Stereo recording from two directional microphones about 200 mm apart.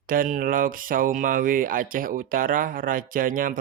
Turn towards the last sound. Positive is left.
turn(degrees=-45)  # may be behind; listen again after turning